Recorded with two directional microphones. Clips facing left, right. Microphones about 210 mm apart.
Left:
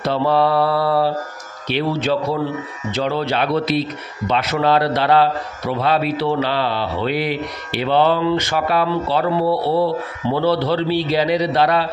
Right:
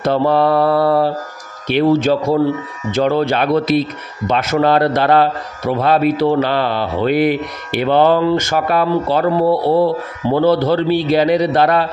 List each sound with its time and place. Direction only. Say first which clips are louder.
0.0 s a man's voice: right 3 dB; 50° right (ahead or behind)